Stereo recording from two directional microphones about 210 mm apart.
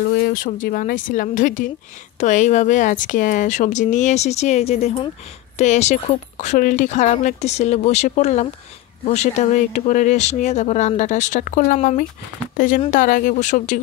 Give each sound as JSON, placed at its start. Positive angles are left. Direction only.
{"t": 0.3, "sound": "speech", "side_deg": 40}